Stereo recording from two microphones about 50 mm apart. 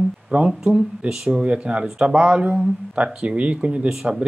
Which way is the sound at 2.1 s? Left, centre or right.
Right.